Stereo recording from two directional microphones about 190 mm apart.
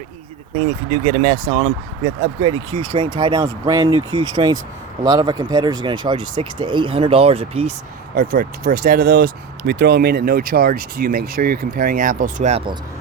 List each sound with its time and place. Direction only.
0.9 s speech: 35° right (ahead or behind)
8.1 s speech: 50° right (ahead or behind); by 12.7 s 35° right (ahead or behind)